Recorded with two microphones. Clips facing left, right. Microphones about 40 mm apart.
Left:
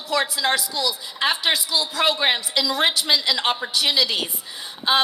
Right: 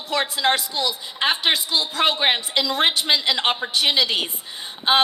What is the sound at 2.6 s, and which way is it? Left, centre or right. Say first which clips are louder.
A woman's voice: even; right.